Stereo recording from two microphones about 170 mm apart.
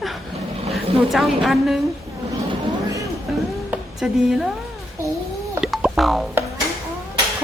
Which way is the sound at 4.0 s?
Centre (ahead or behind).